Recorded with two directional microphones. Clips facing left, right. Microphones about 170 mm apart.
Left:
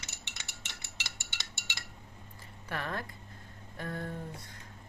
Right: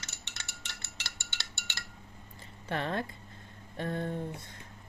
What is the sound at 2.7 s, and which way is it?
A woman's voice, 25° right (ahead or behind).